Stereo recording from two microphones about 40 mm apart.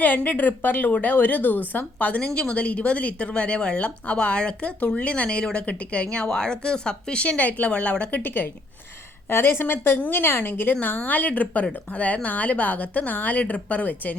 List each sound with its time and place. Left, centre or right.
0.0 s a woman's voice: left
2.2 s speech: left
6.2 s speech: centre
7.3 s speech: left
8.2 s a woman's voice: left
9.3 s a woman's voice: left